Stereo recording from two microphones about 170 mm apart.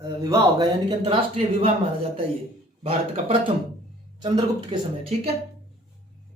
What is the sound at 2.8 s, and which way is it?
Speech, 35° right (ahead or behind).